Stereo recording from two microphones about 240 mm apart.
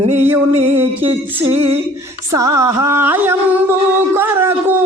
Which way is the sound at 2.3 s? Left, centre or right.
Centre.